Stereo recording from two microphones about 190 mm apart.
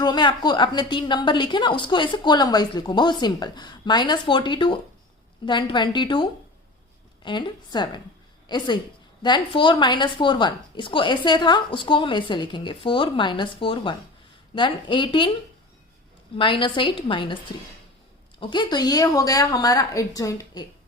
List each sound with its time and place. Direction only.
0.0 s a woman's voice: 25° left (ahead or behind)
7.3 s a woman's voice: 25° left (ahead or behind)
16.4 s a woman's voice: 25° left (ahead or behind)
18.3 s a woman's voice: 20° left (ahead or behind)